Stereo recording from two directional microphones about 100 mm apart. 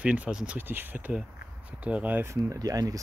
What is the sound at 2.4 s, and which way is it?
Speech, 35° right (ahead or behind).